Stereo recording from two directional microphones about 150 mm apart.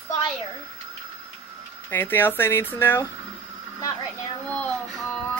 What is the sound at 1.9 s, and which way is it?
Speech, 15° left (ahead or behind).